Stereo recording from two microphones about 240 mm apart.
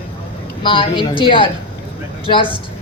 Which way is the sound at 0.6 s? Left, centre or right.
Left.